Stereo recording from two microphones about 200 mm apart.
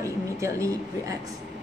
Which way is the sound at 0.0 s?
15° right (ahead or behind).